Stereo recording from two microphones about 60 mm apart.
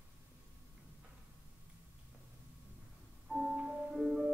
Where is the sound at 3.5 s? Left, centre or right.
Centre.